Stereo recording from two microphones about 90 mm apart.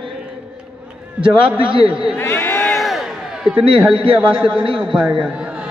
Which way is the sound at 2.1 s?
25° left (ahead or behind).